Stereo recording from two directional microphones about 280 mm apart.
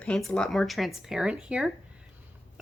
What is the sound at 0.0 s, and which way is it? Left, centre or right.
Speech, centre.